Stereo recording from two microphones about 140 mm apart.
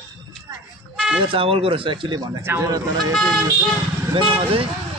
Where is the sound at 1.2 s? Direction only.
40° right (ahead or behind).